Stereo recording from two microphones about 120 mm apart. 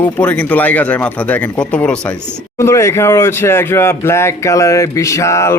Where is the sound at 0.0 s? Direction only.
15° left (ahead or behind).